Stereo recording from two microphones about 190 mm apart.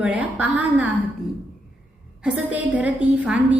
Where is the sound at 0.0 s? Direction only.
5° right (ahead or behind).